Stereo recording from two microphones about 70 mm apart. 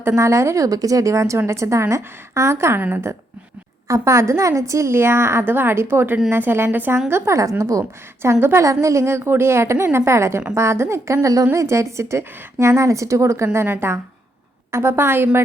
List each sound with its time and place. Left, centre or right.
0.0 s a woman's voice: right
3.8 s a woman's voice: right
7.1 s a woman's voice: right
8.2 s a woman's voice: right
8.6 s a woman's voice: right